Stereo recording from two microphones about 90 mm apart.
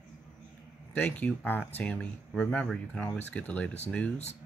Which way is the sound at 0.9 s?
15° left (ahead or behind).